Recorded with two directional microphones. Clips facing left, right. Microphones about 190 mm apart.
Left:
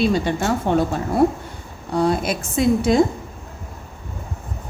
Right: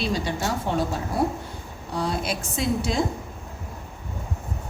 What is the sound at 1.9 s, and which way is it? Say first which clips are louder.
A woman's voice: left 7 dB; 50° left (ahead or behind).